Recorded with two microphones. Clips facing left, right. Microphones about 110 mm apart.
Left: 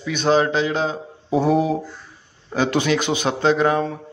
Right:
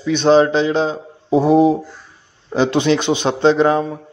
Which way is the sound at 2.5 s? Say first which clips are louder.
Right 4 dB; 20° right (ahead or behind).